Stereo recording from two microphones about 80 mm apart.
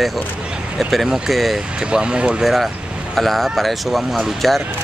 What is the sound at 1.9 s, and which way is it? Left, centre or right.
Speech, centre.